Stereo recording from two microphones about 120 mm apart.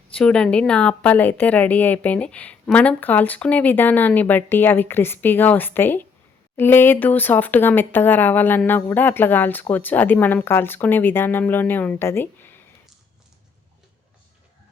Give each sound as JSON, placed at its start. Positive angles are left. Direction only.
{"t": 0.1, "sound": "speech", "side_deg": 10}